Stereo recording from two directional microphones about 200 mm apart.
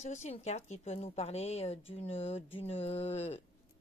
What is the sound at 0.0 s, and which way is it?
Speech, 35° left (ahead or behind).